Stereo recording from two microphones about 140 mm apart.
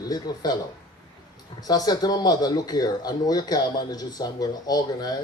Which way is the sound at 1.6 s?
30° left (ahead or behind).